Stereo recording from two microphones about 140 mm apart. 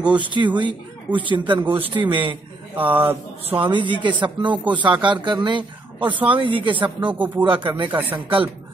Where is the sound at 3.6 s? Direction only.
35° right (ahead or behind).